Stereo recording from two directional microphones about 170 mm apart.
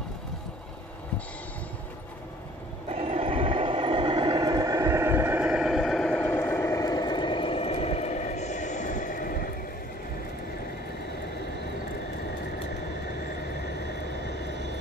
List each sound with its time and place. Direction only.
2.9 s vehicle: 35° right (ahead or behind); by 9.5 s 55° left (ahead or behind)
14.2 s vehicle: 90° right